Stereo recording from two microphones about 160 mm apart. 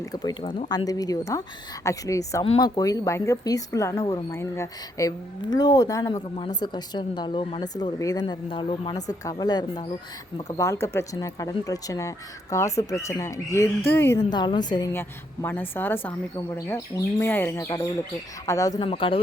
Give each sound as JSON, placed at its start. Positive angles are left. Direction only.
{"t": 0.0, "sound": "speech", "side_deg": 25}
{"t": 14.9, "sound": "a woman's voice", "side_deg": 10}
{"t": 18.8, "sound": "speech", "side_deg": 35}